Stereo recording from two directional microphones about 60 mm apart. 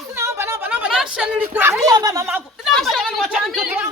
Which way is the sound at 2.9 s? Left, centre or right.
Centre.